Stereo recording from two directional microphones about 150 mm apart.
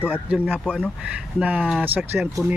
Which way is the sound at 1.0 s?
10° right (ahead or behind).